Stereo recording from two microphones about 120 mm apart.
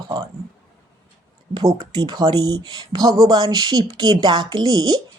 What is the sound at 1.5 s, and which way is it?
Speech, 35° right (ahead or behind).